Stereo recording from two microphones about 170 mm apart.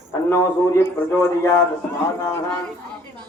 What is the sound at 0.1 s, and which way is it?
A man's voice, 15° left (ahead or behind).